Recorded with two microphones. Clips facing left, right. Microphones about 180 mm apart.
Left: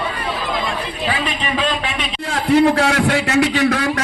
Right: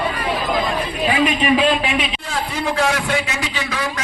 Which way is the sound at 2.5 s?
65° left (ahead or behind).